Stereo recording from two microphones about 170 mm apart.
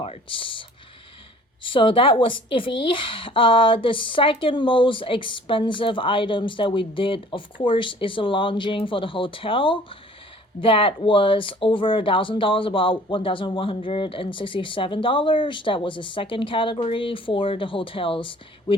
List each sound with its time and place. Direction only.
0.0 s speech: 35° left (ahead or behind)
1.6 s a woman's voice: 30° left (ahead or behind)